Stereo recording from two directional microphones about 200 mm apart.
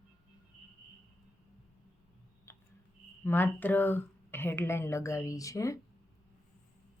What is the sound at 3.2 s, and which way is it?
Speech, 10° left (ahead or behind).